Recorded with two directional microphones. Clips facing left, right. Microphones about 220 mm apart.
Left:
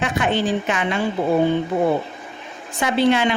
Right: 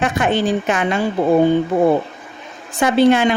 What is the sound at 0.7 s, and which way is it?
Speech, 45° right (ahead or behind).